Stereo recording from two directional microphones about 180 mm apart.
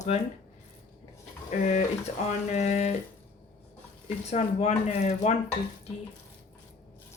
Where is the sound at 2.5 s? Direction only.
40° left (ahead or behind).